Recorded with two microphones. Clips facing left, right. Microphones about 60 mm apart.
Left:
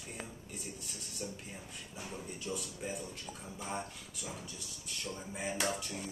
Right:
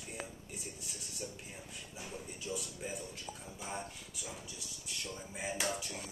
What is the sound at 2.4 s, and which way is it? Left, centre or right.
Speech, centre.